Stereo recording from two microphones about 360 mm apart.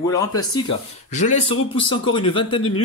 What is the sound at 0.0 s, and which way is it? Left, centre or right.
Speech, centre.